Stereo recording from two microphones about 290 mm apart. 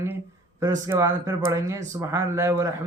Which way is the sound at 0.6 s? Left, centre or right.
Centre.